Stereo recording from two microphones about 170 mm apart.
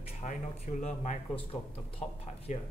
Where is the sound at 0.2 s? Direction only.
45° left (ahead or behind).